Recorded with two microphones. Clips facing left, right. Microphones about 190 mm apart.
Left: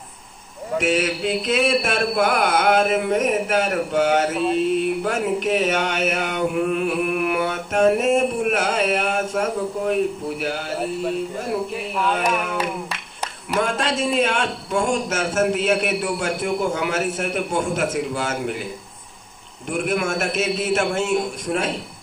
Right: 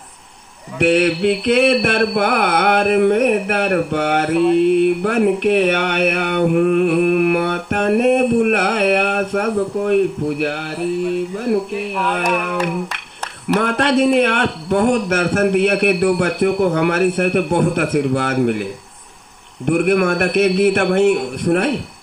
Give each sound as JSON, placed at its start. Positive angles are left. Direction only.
{"t": 0.7, "sound": "a man's voice", "side_deg": -65}
{"t": 13.6, "sound": "a man's voice", "side_deg": -60}